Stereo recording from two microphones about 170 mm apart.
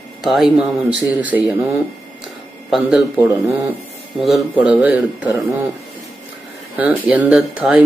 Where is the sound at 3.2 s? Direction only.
20° left (ahead or behind).